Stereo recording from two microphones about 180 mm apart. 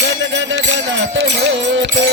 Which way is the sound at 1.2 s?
75° right (ahead or behind).